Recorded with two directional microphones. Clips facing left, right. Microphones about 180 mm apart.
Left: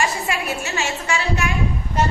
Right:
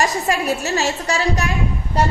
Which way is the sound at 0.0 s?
40° right (ahead or behind).